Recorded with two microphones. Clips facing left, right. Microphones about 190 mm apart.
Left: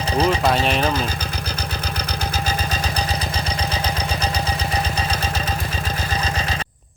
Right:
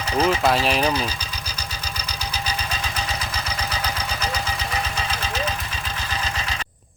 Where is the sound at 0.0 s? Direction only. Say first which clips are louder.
Left 2 dB; 30° left (ahead or behind).